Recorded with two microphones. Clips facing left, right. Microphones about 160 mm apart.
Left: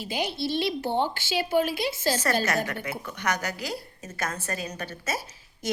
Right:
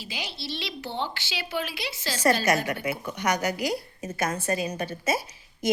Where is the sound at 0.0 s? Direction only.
50° left (ahead or behind).